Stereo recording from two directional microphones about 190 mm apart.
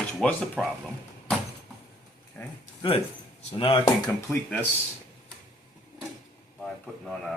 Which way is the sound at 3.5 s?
25° left (ahead or behind).